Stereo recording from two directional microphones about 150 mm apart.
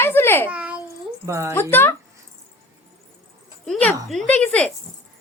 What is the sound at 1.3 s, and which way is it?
Speech, 20° right (ahead or behind).